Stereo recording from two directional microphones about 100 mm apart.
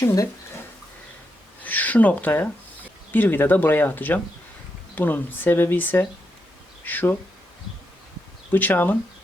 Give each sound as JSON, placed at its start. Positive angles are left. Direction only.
{"t": 0.0, "sound": "speech", "side_deg": 35}
{"t": 1.6, "sound": "speech", "side_deg": 15}
{"t": 8.5, "sound": "speech", "side_deg": 20}